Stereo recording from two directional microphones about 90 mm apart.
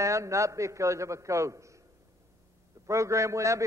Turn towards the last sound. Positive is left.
turn(degrees=-35)  # may be behind; listen again after turning